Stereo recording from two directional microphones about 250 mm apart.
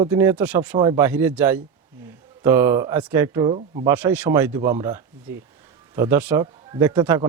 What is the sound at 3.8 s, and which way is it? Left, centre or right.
Speech, centre.